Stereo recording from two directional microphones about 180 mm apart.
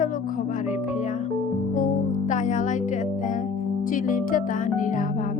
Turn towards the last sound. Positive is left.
turn(degrees=45)  # may be behind; listen again after turning